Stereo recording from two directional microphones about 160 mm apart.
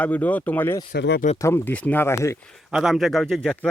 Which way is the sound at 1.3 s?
15° left (ahead or behind).